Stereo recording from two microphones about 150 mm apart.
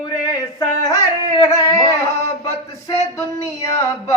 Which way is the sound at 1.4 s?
25° left (ahead or behind).